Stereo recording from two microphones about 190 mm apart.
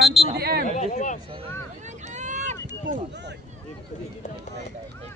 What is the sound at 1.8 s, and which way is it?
Vehicle, 40° right (ahead or behind).